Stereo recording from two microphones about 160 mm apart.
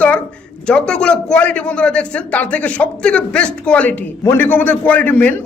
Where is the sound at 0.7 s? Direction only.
5° left (ahead or behind).